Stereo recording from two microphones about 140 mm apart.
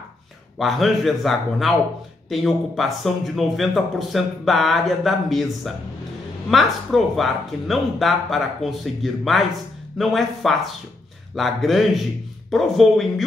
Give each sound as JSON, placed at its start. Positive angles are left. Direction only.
{"t": 0.6, "sound": "a man's voice", "side_deg": 0}